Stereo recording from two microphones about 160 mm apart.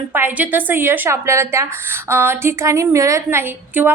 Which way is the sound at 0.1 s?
10° right (ahead or behind).